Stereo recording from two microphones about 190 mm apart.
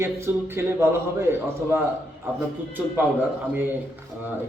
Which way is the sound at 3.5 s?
10° right (ahead or behind).